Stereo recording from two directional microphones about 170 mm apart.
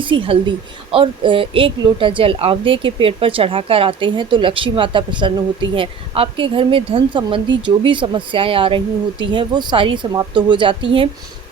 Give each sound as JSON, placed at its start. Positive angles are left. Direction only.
{"t": 0.0, "sound": "a woman's voice", "side_deg": -30}